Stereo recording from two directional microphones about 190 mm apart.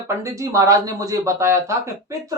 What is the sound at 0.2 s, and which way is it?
Speech, 15° right (ahead or behind).